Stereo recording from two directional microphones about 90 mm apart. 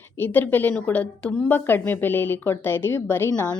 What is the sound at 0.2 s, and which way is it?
A woman's voice, 20° left (ahead or behind).